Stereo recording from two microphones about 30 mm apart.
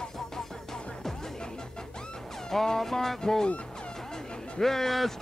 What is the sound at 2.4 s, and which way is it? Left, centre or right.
Speech, centre.